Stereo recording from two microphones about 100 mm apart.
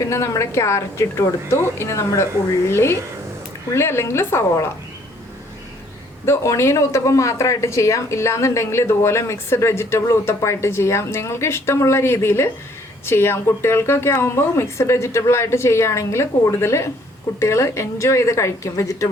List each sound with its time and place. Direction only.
0.0 s speech: 30° left (ahead or behind)
6.2 s speech: 30° left (ahead or behind)